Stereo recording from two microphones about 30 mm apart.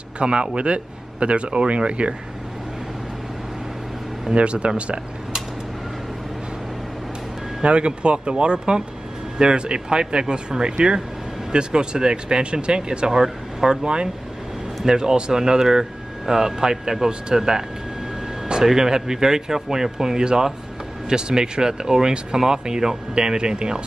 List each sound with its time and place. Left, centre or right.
0.2 s speech: right
4.3 s speech: right
7.6 s speech: right